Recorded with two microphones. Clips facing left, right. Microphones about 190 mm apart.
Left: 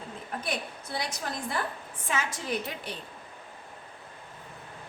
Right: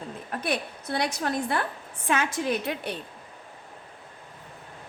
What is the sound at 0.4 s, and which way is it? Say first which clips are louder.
A woman's voice: right 7 dB; 65° right (ahead or behind).